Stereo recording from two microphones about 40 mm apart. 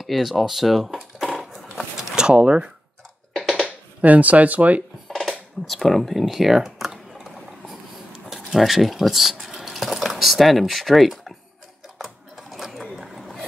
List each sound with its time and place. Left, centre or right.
0.0 s speech: centre
1.3 s a sound: centre
2.1 s speech: right
4.0 s speech: right
5.0 s dishes: centre
5.7 s typing: centre
8.3 s speech: centre
12.9 s a sound: centre